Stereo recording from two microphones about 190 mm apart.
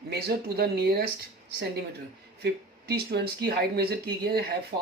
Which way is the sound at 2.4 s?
55° right (ahead or behind).